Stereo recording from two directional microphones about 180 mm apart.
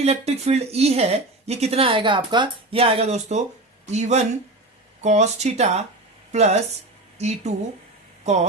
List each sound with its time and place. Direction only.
0.0 s a woman's voice: 35° right (ahead or behind)